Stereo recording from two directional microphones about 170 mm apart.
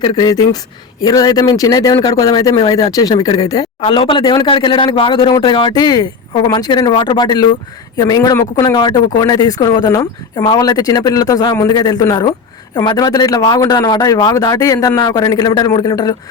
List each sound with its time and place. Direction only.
0.0 s speech: 25° left (ahead or behind)